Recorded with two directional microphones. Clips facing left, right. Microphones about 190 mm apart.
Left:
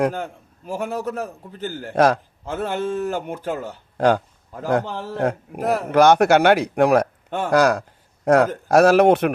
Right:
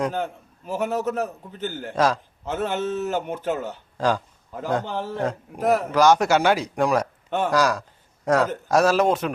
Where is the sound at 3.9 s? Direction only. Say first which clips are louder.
Left 6 dB; 55° left (ahead or behind).